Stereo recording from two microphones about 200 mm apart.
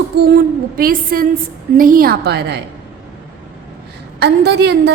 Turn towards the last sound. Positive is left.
turn(degrees=-55)  # may be behind; listen again after turning